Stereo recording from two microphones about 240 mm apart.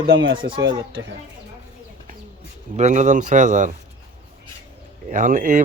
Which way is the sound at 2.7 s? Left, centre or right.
Right.